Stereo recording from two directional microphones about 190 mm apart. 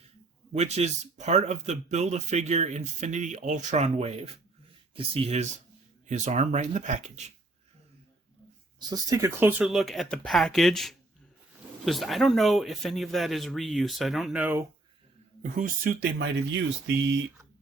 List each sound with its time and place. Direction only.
0.5 s speech: 35° right (ahead or behind)
8.9 s a man's voice: 20° right (ahead or behind)
15.5 s speech: 45° right (ahead or behind); by 16.9 s 75° right (ahead or behind)